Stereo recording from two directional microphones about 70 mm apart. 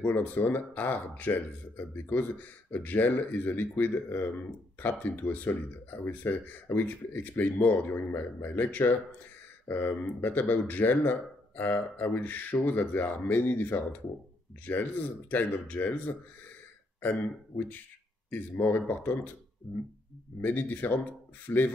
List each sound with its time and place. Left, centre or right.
0.0 s speech: left
20.3 s speech: left